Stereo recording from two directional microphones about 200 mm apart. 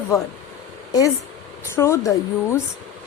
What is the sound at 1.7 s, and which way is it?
Speech, 15° left (ahead or behind).